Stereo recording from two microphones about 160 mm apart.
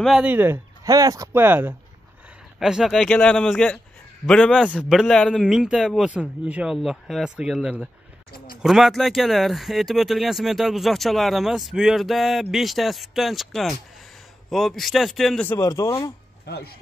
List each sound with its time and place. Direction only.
0.0 s speech: 5° right (ahead or behind)
0.8 s speech: 20° right (ahead or behind); by 15.4 s centre (ahead or behind)
15.4 s speech: 15° left (ahead or behind)
16.4 s speech: 80° left